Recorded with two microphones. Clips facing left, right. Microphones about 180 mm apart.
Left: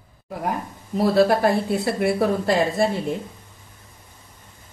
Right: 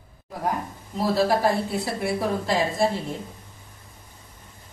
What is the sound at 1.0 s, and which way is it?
A woman's voice, 60° left (ahead or behind).